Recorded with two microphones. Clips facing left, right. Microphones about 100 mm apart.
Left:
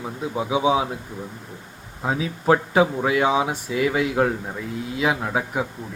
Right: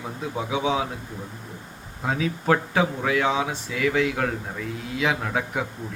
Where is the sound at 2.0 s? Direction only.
15° left (ahead or behind).